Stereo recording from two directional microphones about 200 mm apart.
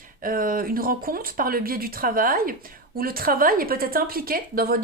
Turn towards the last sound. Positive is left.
turn(degrees=-45)  # may be behind; listen again after turning